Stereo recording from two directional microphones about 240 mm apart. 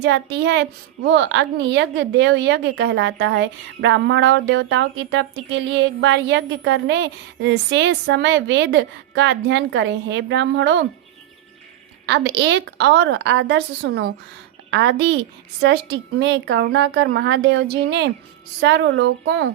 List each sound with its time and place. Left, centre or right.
0.0 s a child's voice: right
12.0 s a child's voice: right